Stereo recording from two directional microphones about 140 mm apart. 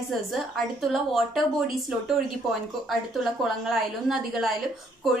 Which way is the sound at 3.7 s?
Centre (ahead or behind).